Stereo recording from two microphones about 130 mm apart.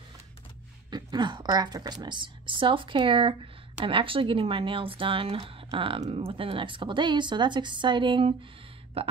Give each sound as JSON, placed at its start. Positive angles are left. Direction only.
{"t": 0.8, "sound": "a woman's voice", "side_deg": -35}